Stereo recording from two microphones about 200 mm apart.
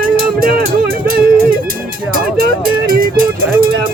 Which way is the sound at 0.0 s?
45° right (ahead or behind).